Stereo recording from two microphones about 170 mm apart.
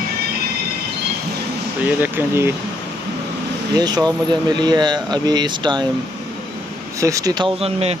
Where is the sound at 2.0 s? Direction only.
15° right (ahead or behind).